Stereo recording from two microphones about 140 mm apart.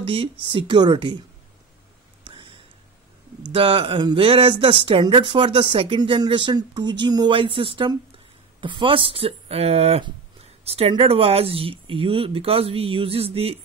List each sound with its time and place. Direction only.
0.0 s speech: 40° right (ahead or behind)
2.2 s a sound: 40° right (ahead or behind)
3.5 s speech: 40° right (ahead or behind)